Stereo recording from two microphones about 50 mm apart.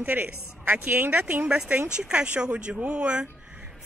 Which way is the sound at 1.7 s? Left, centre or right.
Right.